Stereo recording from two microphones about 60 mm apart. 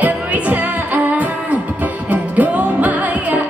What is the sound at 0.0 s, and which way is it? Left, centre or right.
Music, right.